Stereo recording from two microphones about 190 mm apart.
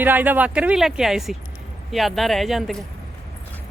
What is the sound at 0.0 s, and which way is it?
Speech, 10° right (ahead or behind).